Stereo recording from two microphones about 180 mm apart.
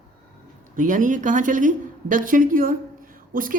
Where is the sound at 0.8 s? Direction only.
45° right (ahead or behind).